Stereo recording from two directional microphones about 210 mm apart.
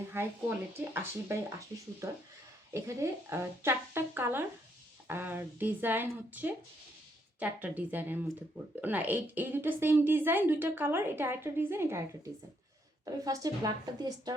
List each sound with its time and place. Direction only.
0.1 s speech: 10° right (ahead or behind)
13.2 s speech: 15° right (ahead or behind)